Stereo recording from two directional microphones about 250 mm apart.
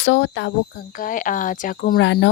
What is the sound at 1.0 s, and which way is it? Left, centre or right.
Speech, left.